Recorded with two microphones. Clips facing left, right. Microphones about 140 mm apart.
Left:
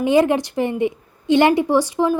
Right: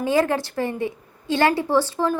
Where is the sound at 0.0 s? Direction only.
20° left (ahead or behind).